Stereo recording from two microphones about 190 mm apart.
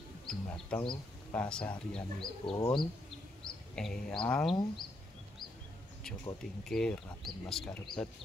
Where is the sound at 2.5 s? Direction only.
20° left (ahead or behind).